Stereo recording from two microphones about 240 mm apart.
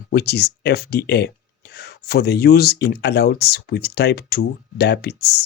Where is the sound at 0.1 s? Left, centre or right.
Left.